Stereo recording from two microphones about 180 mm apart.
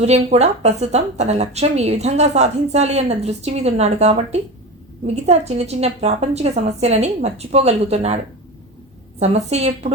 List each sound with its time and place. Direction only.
0.0 s a woman's voice: 35° right (ahead or behind)